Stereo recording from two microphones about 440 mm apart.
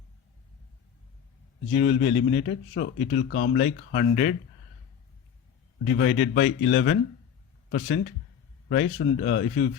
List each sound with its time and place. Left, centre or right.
1.7 s a man's voice: centre
2.0 s speech: left
6.0 s speech: left